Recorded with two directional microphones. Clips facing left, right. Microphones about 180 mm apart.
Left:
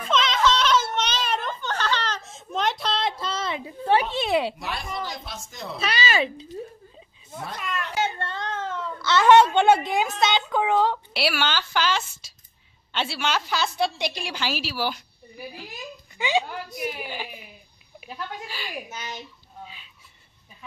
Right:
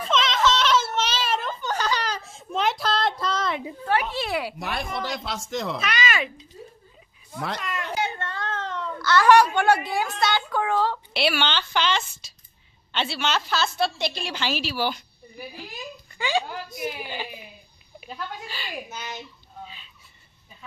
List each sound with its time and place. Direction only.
0.1 s a sound: centre (ahead or behind)
3.8 s speech: 30° left (ahead or behind)
4.6 s a woman's voice: 55° right (ahead or behind); by 5.8 s 90° right
5.8 s speech: 30° left (ahead or behind)
8.2 s whimper: 25° left (ahead or behind)
8.5 s baby cry: 10° left (ahead or behind)
9.0 s a woman's voice: 20° left (ahead or behind)
11.1 s a woman's voice: 5° left (ahead or behind)
16.2 s a woman's voice: 20° left (ahead or behind)
18.0 s a woman's voice: 10° left (ahead or behind)